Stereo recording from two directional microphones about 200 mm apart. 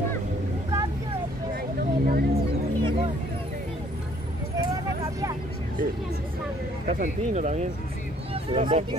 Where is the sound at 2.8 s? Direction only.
25° right (ahead or behind).